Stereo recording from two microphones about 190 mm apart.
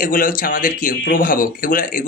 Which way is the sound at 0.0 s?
45° left (ahead or behind).